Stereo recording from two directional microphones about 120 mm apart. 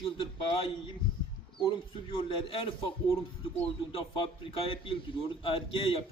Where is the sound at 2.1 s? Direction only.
45° left (ahead or behind).